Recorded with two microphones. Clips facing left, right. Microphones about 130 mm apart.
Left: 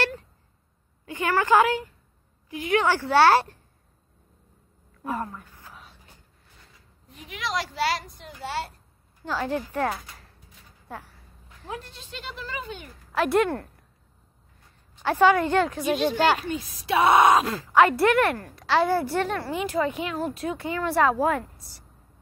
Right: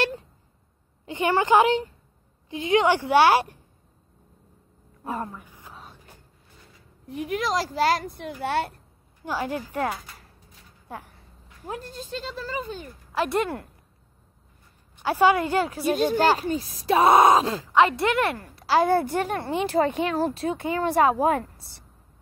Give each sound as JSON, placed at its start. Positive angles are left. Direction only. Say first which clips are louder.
{"t": 1.0, "sound": "a woman's voice", "louder": "right 2 dB", "side_deg": -20}
{"t": 5.0, "sound": "speech", "louder": "left 1 dB", "side_deg": -30}
{"t": 5.3, "sound": "a sound", "louder": "right 1 dB", "side_deg": -15}
{"t": 7.1, "sound": "a woman's voice", "louder": "right 15 dB", "side_deg": -60}
{"t": 7.3, "sound": "a woman's voice", "louder": "right 4 dB", "side_deg": -40}
{"t": 9.2, "sound": "a woman's voice", "louder": "left 1 dB", "side_deg": -15}
{"t": 11.6, "sound": "speech", "louder": "right 3 dB", "side_deg": -40}
{"t": 13.1, "sound": "speech", "louder": "left 3 dB", "side_deg": 0}
{"t": 15.0, "sound": "a woman's voice", "louder": "left 1 dB", "side_deg": -15}
{"t": 15.8, "sound": "speech", "louder": "right 1 dB", "side_deg": -45}
{"t": 17.7, "sound": "speech", "louder": "left 2 dB", "side_deg": 0}
{"t": 18.6, "sound": "a woman's voice", "louder": "right 2 dB", "side_deg": -35}
{"t": 19.3, "sound": "speech", "louder": "right 3 dB", "side_deg": -25}